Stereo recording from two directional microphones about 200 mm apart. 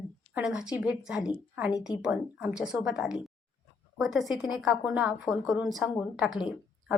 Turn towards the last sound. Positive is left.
turn(degrees=-5)  # may be behind; listen again after turning